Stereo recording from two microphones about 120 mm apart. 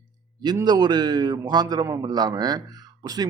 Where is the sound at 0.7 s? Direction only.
35° right (ahead or behind).